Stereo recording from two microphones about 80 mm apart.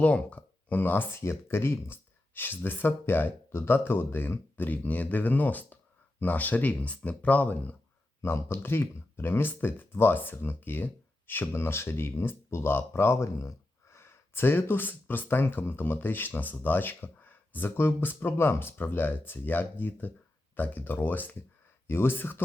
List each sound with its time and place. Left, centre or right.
0.0 s speech: centre